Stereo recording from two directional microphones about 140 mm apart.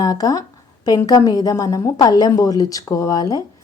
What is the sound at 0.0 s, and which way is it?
Speech, 25° left (ahead or behind).